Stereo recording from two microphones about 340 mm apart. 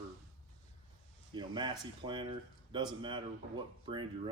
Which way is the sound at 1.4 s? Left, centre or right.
Centre.